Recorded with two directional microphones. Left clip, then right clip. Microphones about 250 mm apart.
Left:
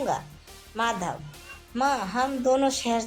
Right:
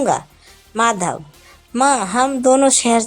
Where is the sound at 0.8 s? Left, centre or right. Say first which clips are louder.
Right 10 dB; right.